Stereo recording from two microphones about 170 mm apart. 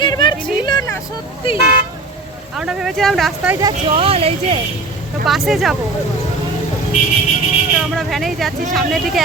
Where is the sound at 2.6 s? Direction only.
Centre (ahead or behind).